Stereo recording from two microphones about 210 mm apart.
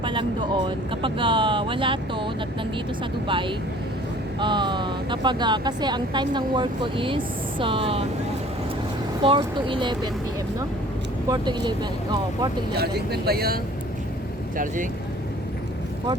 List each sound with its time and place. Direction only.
0.0 s speech: 25° right (ahead or behind)
9.2 s speech: 25° right (ahead or behind)
11.3 s speech: 20° right (ahead or behind)
12.7 s speech: 50° right (ahead or behind)